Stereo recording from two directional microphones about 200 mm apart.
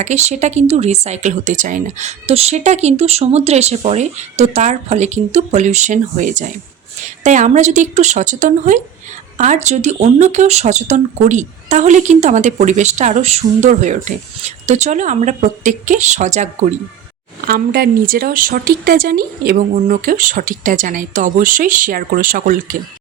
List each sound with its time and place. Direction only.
0.0 s speech: 35° right (ahead or behind)
17.4 s speech: 50° right (ahead or behind)